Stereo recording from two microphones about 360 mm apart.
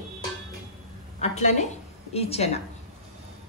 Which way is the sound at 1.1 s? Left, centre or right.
Centre.